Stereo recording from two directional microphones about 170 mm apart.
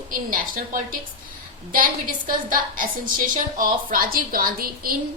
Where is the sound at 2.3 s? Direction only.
55° right (ahead or behind).